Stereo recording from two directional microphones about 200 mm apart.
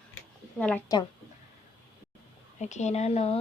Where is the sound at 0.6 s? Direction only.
5° left (ahead or behind).